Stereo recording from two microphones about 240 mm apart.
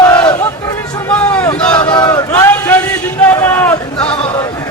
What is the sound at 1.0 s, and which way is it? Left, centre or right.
Vehicle, centre.